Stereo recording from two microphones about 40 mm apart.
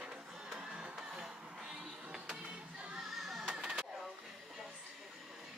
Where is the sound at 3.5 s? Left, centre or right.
Centre.